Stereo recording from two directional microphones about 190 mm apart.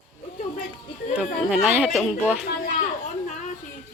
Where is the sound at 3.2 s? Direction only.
40° left (ahead or behind).